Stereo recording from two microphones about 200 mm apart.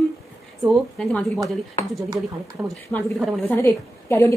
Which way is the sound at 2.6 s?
5° left (ahead or behind).